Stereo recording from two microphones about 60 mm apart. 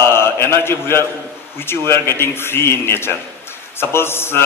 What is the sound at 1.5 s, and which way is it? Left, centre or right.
A man's voice, left.